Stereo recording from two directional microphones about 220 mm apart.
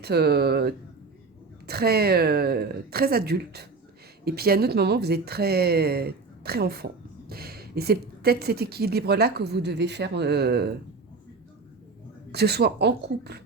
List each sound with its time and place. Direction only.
0.0 s speech: 45° right (ahead or behind)
12.3 s speech: 50° right (ahead or behind)